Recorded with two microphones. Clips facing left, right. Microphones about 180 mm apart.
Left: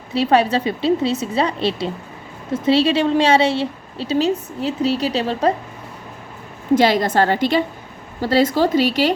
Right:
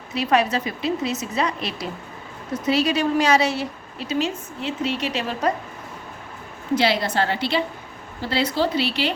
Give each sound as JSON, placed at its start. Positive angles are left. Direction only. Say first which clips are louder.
{"t": 0.1, "sound": "a woman's voice", "louder": "left 4 dB", "side_deg": 30}
{"t": 6.7, "sound": "speech", "louder": "left 5 dB", "side_deg": 45}